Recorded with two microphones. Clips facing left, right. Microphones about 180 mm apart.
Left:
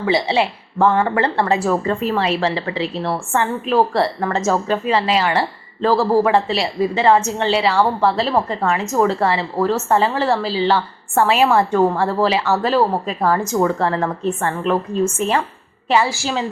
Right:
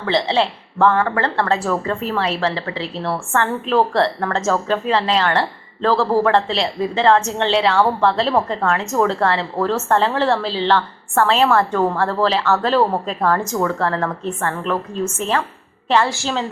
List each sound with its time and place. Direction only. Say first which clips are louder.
0.0 s a woman's voice: left 1 dB; 10° left (ahead or behind)
13.6 s a woman's voice: left 2 dB; 20° left (ahead or behind)
15.9 s a woman's voice: even; 5° left (ahead or behind)